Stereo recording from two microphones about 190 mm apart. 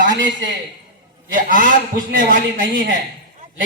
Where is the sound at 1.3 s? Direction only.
45° right (ahead or behind).